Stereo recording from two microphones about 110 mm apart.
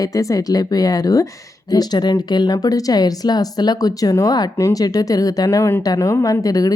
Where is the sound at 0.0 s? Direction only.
30° left (ahead or behind).